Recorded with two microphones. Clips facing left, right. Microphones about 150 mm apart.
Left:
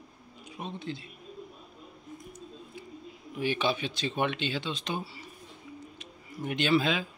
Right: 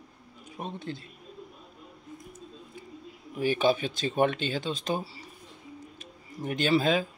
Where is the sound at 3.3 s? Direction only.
45° right (ahead or behind).